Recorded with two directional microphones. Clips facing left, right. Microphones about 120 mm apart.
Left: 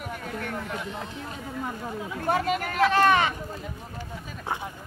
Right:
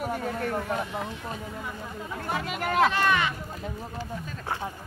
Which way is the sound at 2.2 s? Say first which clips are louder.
Left 5 dB; 45° left (ahead or behind).